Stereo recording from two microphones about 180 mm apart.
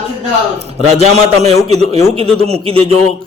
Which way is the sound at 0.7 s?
35° right (ahead or behind).